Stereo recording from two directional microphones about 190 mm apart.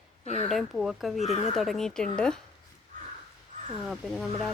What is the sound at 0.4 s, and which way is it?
Speech, centre (ahead or behind).